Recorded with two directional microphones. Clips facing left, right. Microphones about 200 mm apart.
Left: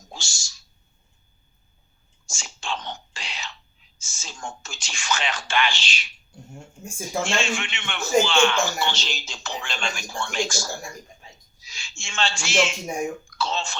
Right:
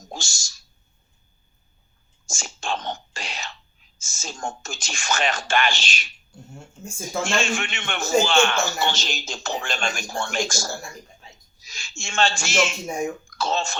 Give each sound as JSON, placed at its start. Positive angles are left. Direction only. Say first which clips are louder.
{"t": 0.1, "sound": "a sound", "louder": "right 5 dB", "side_deg": -45}
{"t": 2.2, "sound": "whispering", "louder": "right 4 dB", "side_deg": -45}
{"t": 4.0, "sound": "a man's voice", "louder": "right 5 dB", "side_deg": -45}
{"t": 7.3, "sound": "a man's voice", "louder": "right 2 dB", "side_deg": -45}